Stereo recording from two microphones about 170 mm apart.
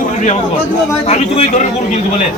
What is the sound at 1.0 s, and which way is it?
Speech, 35° left (ahead or behind).